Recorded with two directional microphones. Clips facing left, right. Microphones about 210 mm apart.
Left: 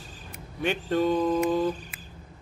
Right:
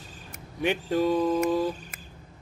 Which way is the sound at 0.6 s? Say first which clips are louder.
Right 1 dB; 15° right (ahead or behind).